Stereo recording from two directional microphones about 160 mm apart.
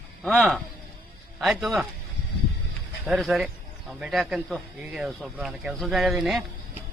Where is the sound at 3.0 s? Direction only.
Centre (ahead or behind).